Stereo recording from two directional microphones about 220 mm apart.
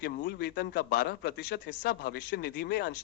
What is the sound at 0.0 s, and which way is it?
Speech, 45° left (ahead or behind).